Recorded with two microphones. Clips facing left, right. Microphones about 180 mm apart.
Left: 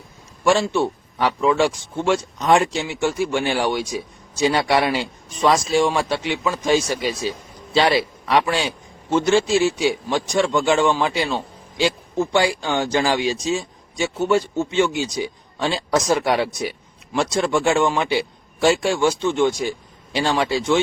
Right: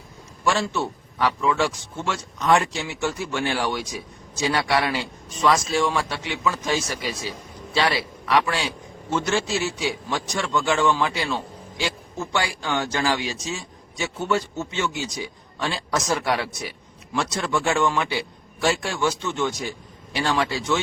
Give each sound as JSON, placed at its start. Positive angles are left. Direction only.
{"t": 0.4, "sound": "a man's voice", "side_deg": 20}